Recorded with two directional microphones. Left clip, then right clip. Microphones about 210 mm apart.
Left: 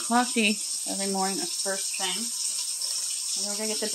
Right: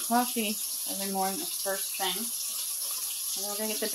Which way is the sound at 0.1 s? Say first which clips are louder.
Left 4 dB; 30° left (ahead or behind).